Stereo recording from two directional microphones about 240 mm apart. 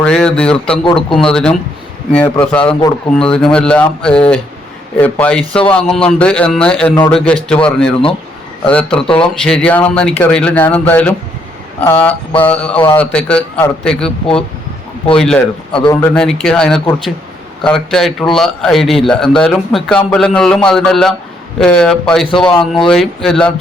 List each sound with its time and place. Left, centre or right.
0.0 s a man's voice: centre
11.9 s a sound: centre
12.4 s a man's voice: centre
15.7 s a man's voice: left
16.0 s a man's voice: centre